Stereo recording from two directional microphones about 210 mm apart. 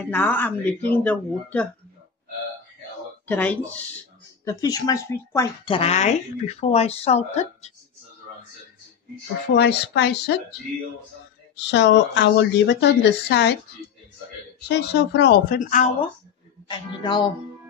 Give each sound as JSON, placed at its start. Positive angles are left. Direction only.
{"t": 0.0, "sound": "speech", "side_deg": 10}
{"t": 3.3, "sound": "speech", "side_deg": 5}
{"t": 4.5, "sound": "speech", "side_deg": 15}
{"t": 5.7, "sound": "speech", "side_deg": 30}
{"t": 9.6, "sound": "speech", "side_deg": 55}
{"t": 11.5, "sound": "speech", "side_deg": 55}
{"t": 14.7, "sound": "speech", "side_deg": 55}
{"t": 16.6, "sound": "speech", "side_deg": 20}